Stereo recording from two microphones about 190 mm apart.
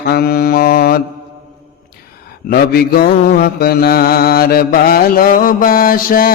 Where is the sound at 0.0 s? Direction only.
55° left (ahead or behind).